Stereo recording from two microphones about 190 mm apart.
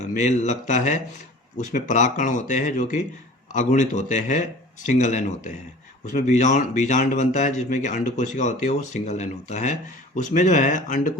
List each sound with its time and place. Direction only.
0.0 s speech: 40° left (ahead or behind)